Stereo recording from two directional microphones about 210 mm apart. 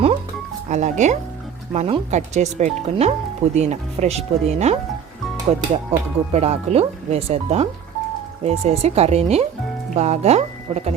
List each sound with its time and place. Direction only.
0.7 s speech: 35° right (ahead or behind)